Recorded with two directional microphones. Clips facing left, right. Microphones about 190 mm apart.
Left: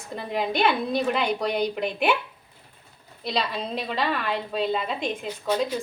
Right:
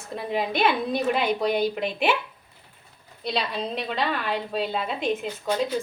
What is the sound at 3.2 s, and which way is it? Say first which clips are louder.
A woman's voice: even; centre (ahead or behind).